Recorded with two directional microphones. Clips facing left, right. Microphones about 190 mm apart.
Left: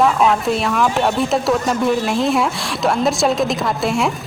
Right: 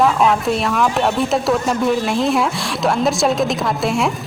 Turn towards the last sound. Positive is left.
turn(degrees=0)  # may be behind; listen again after turning